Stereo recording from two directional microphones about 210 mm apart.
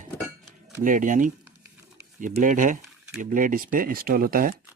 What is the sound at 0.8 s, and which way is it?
Speech, 40° right (ahead or behind).